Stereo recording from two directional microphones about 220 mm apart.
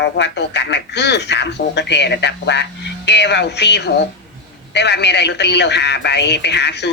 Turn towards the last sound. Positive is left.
turn(degrees=50)  # may be behind; listen again after turning